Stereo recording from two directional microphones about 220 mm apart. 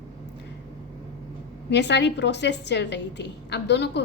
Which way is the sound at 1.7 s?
50° left (ahead or behind).